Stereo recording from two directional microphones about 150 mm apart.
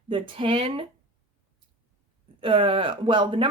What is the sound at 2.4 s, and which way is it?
Speech, 35° right (ahead or behind).